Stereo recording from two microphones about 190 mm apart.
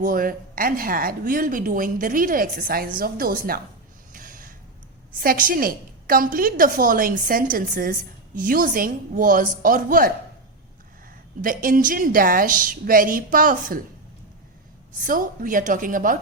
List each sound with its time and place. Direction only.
0.0 s a woman's voice: 50° right (ahead or behind)
4.1 s snort: 45° right (ahead or behind)
5.2 s a woman's voice: 50° right (ahead or behind)
11.4 s a woman's voice: 45° right (ahead or behind)
15.0 s a woman's voice: 45° right (ahead or behind)